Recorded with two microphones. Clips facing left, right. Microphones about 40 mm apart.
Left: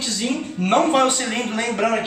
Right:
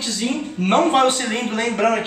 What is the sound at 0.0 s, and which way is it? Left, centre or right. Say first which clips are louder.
Speech: right 1 dB; centre.